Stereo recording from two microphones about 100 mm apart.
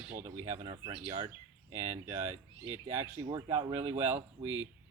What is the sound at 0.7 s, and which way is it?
Speech, 55° right (ahead or behind).